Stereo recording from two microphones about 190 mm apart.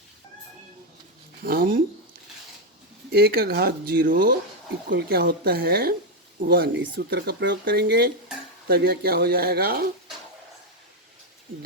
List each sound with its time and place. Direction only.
1.4 s speech: 50° right (ahead or behind)
3.1 s speech: 55° right (ahead or behind)